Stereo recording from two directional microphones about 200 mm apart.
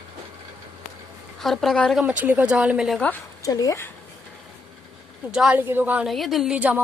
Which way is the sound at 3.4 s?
20° left (ahead or behind).